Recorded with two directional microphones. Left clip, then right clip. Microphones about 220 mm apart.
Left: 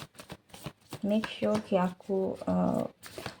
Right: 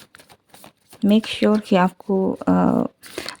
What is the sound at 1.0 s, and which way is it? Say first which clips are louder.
Speech: right 11 dB; 45° right (ahead or behind).